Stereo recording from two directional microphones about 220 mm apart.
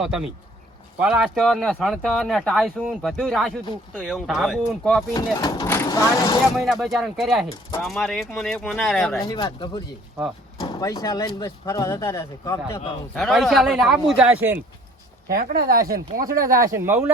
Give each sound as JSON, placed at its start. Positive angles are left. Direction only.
{"t": 0.0, "sound": "speech", "side_deg": -5}
{"t": 5.1, "sound": "speech", "side_deg": 20}
{"t": 6.6, "sound": "speech", "side_deg": 0}
{"t": 9.1, "sound": "speech", "side_deg": 20}
{"t": 13.1, "sound": "speech", "side_deg": 0}
{"t": 15.3, "sound": "speech", "side_deg": -40}
{"t": 16.6, "sound": "speech", "side_deg": -15}